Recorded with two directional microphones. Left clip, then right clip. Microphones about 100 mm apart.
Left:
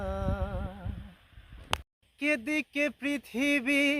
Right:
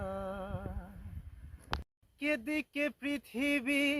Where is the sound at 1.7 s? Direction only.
55° right (ahead or behind).